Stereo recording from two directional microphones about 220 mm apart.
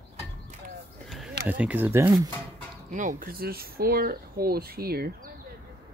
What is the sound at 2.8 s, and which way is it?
Speech, 35° right (ahead or behind).